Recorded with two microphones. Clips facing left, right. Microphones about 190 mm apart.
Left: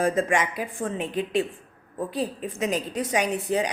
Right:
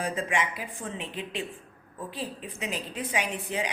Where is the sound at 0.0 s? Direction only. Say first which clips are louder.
Left 7 dB; 45° left (ahead or behind).